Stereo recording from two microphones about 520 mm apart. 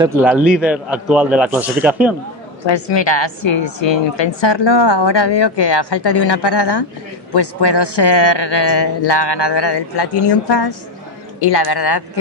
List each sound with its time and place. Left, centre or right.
0.0 s a man's voice: centre
2.6 s a woman's voice: left